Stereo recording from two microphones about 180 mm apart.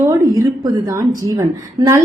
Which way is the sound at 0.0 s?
15° right (ahead or behind).